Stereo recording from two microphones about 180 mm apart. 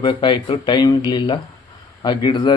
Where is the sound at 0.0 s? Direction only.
25° left (ahead or behind).